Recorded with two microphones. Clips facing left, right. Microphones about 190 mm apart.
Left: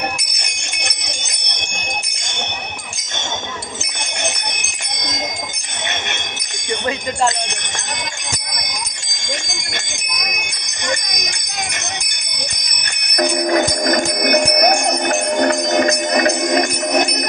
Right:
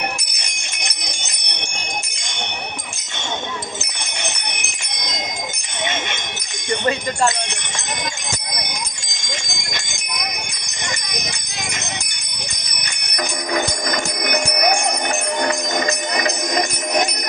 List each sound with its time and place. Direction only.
13.1 s jingle bell: 45° left (ahead or behind)
15.9 s music: 45° left (ahead or behind)